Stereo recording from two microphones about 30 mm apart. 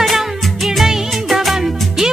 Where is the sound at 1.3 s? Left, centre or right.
Centre.